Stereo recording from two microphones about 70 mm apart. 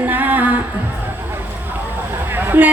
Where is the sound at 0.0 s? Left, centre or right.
Right.